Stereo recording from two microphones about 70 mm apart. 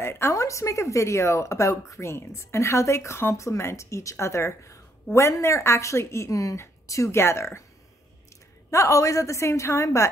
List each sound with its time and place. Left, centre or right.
0.0 s a sound: left
0.3 s speech: left
8.6 s speech: left